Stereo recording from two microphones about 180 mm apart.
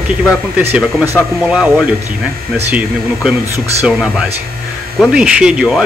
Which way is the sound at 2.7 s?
10° right (ahead or behind).